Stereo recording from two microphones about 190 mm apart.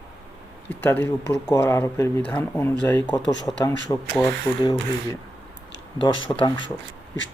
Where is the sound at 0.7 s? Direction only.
10° left (ahead or behind).